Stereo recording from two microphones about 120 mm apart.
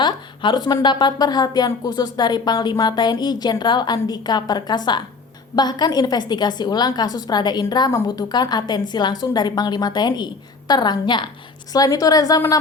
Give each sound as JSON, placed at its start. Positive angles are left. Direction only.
{"t": 0.0, "sound": "a woman's voice", "side_deg": 40}